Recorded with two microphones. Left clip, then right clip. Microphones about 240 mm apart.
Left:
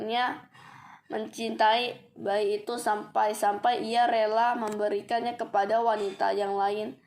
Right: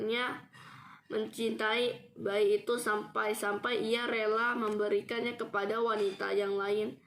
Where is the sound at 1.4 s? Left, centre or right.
Centre.